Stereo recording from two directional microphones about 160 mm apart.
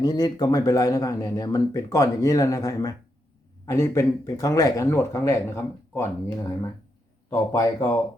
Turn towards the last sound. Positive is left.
turn(degrees=20)  # may be behind; listen again after turning